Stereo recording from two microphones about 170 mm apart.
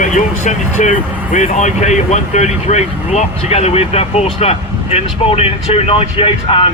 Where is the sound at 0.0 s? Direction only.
45° left (ahead or behind).